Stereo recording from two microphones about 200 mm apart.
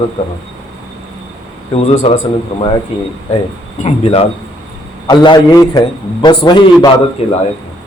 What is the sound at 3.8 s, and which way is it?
Speech, 30° left (ahead or behind).